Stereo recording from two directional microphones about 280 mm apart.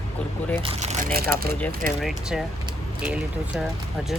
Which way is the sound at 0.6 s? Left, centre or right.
Right.